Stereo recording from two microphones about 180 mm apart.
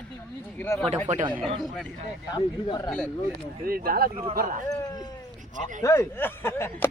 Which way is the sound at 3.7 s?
55° right (ahead or behind).